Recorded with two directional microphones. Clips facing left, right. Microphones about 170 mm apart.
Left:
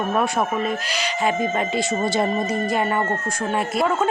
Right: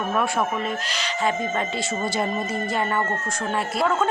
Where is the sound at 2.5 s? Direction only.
15° left (ahead or behind).